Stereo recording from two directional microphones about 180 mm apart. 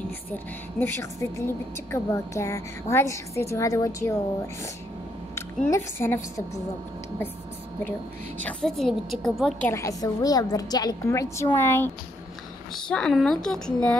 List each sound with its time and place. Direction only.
0.3 s a woman's voice: 10° left (ahead or behind)
5.7 s a woman's voice: 15° left (ahead or behind)
8.5 s a woman's voice: 5° left (ahead or behind)
9.7 s a woman's voice: 15° left (ahead or behind)